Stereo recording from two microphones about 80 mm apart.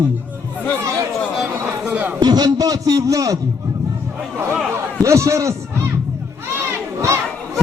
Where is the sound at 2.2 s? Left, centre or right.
Right.